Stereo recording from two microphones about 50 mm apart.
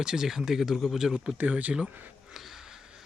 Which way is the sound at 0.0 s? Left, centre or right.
Centre.